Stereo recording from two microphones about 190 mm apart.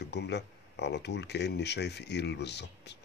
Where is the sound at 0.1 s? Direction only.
65° left (ahead or behind).